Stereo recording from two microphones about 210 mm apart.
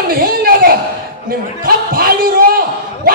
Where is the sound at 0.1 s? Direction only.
45° right (ahead or behind).